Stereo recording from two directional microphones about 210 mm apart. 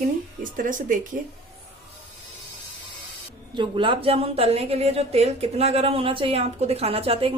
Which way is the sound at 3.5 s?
25° right (ahead or behind).